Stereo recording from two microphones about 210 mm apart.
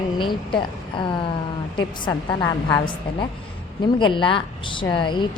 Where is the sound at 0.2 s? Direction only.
20° left (ahead or behind).